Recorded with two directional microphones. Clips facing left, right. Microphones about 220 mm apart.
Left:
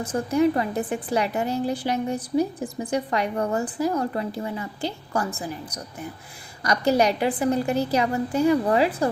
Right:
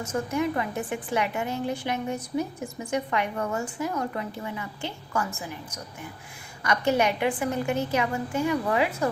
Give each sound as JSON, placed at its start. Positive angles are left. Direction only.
{"t": 0.0, "sound": "a woman's voice", "side_deg": 35}